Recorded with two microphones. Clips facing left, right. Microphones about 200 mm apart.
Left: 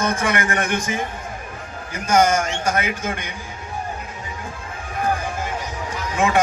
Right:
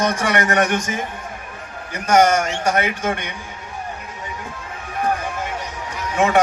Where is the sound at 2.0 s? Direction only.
70° right (ahead or behind).